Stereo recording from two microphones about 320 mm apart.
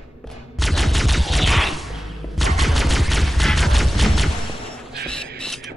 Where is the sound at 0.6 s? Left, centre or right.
Centre.